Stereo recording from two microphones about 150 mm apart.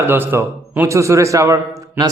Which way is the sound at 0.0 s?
15° right (ahead or behind).